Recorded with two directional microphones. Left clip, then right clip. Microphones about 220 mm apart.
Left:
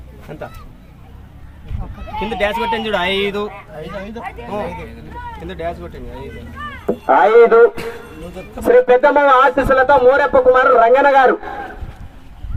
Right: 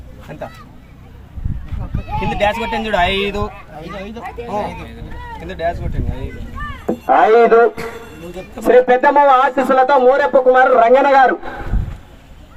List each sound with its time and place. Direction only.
2.4 s speech: 25° left (ahead or behind)
5.5 s speech: 25° left (ahead or behind)
6.8 s speech: 35° left (ahead or behind)